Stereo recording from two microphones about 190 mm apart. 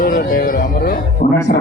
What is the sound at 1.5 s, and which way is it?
Speech, 50° left (ahead or behind).